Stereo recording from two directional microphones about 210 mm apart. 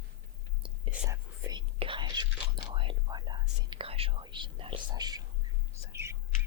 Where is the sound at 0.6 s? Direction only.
15° right (ahead or behind).